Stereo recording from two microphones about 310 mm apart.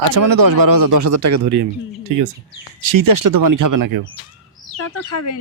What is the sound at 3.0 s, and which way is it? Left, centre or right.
Speech, right.